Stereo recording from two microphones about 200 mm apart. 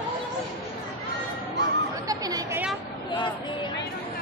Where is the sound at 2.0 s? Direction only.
20° right (ahead or behind).